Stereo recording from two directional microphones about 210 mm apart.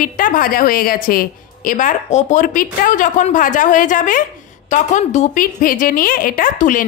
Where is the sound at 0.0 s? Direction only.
40° left (ahead or behind).